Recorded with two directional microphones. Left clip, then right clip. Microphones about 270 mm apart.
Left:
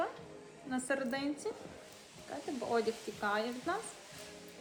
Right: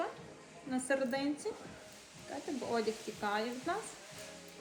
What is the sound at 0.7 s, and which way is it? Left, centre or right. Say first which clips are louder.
Speech: right 2 dB; centre.